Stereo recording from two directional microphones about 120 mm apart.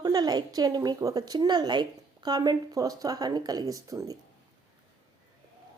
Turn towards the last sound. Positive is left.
turn(degrees=-30)  # may be behind; listen again after turning